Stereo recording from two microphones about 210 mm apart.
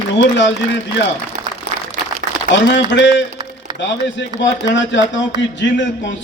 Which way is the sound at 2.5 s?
60° left (ahead or behind).